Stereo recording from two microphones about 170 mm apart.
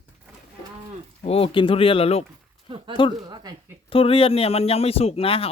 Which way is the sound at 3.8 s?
35° left (ahead or behind).